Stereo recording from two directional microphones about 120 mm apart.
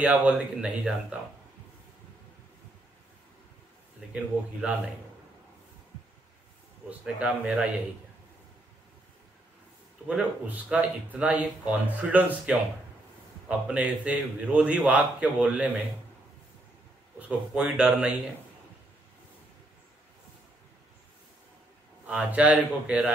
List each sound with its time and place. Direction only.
0.0 s speech: 10° right (ahead or behind)
4.1 s speech: 10° right (ahead or behind)
6.9 s speech: 10° right (ahead or behind)
10.0 s speech: 10° right (ahead or behind)
17.6 s speech: 5° right (ahead or behind)
22.0 s speech: 10° right (ahead or behind)